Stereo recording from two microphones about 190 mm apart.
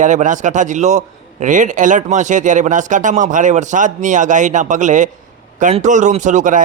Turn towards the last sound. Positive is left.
turn(degrees=-40)  # may be behind; listen again after turning